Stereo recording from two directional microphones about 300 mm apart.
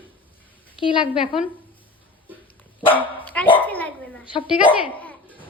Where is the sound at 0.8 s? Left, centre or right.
Centre.